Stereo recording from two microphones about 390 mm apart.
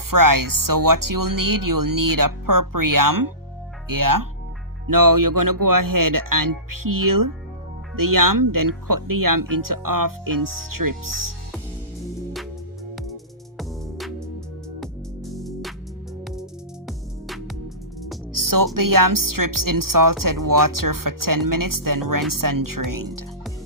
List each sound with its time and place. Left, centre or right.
0.1 s speech: right
13.6 s music: centre
18.3 s speech: right